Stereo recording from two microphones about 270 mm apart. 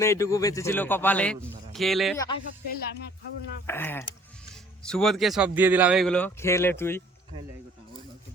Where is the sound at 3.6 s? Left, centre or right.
Centre.